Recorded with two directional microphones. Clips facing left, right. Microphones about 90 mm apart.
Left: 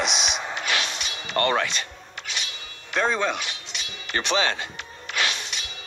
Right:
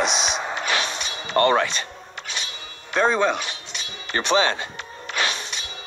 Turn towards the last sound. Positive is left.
turn(degrees=-35)  # may be behind; listen again after turning